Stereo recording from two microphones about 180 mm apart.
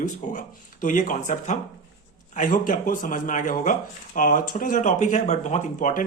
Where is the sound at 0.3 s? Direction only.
45° left (ahead or behind).